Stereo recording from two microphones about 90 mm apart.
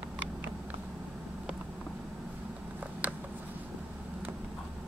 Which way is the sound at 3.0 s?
20° right (ahead or behind).